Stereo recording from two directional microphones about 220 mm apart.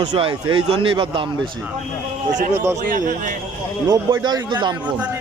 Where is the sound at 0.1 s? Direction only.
25° right (ahead or behind).